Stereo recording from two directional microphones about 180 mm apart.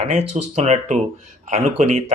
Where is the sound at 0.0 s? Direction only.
35° right (ahead or behind).